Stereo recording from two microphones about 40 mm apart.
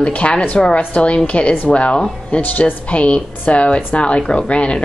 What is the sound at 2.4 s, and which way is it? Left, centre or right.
A woman's voice, left.